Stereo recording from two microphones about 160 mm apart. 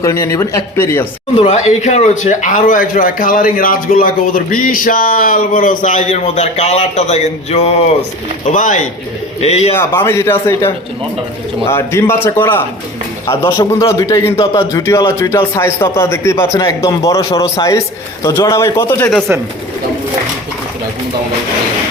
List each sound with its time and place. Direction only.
0.0 s speech: 20° left (ahead or behind)
1.4 s a man's voice: 40° left (ahead or behind)
9.7 s a man's voice: 15° left (ahead or behind)